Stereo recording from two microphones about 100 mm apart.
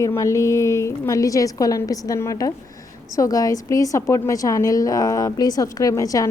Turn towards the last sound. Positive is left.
turn(degrees=35)  # may be behind; listen again after turning